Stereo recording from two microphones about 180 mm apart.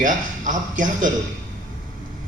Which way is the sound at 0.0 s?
45° right (ahead or behind).